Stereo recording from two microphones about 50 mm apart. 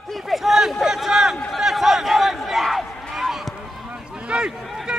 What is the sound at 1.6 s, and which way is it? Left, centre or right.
Crowd, centre.